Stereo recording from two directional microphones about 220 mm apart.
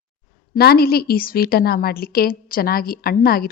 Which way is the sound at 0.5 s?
45° left (ahead or behind).